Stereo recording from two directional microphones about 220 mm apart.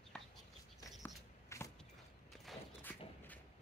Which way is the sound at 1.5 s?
15° left (ahead or behind).